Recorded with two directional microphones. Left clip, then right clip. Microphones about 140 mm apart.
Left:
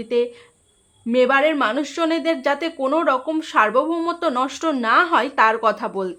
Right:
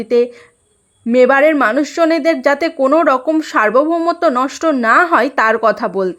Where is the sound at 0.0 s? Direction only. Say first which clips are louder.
Right 7 dB; 55° right (ahead or behind).